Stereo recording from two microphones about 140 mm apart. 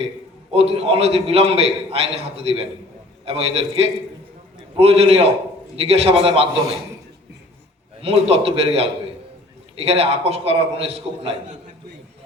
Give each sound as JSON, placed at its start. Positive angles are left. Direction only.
{"t": 0.5, "sound": "a man's voice", "side_deg": -45}
{"t": 8.0, "sound": "a man's voice", "side_deg": -45}